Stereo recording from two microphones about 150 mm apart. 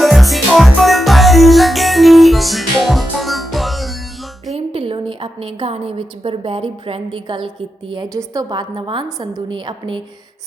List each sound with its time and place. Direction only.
0.0 s music: centre (ahead or behind)
4.5 s a woman's voice: 35° right (ahead or behind)